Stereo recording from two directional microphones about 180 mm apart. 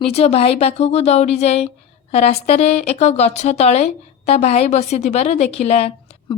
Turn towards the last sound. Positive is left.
turn(degrees=35)  # may be behind; listen again after turning